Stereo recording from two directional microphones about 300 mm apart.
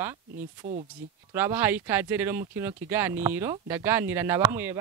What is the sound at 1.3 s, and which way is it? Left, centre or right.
Speech, centre.